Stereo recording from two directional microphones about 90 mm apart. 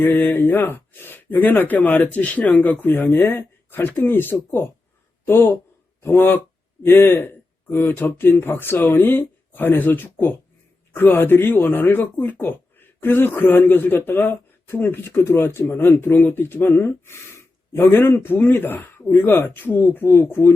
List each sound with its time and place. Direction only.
0.0 s a man's voice: 25° left (ahead or behind)